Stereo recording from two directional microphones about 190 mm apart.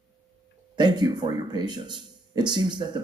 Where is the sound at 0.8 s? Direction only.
20° right (ahead or behind).